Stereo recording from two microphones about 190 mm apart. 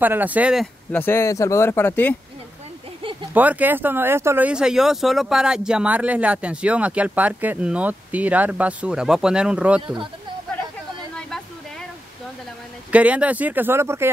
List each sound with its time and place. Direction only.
0.0 s speech: 10° right (ahead or behind)
0.9 s speech: 10° left (ahead or behind)
3.0 s a sound: 25° right (ahead or behind)
3.3 s speech: 10° right (ahead or behind)
11.1 s a sound: 5° left (ahead or behind)
12.9 s speech: 5° right (ahead or behind)